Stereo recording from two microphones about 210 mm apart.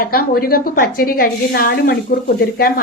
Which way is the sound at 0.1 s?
45° left (ahead or behind).